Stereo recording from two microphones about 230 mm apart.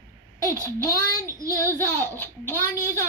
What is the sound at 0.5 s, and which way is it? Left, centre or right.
A child's voice, centre.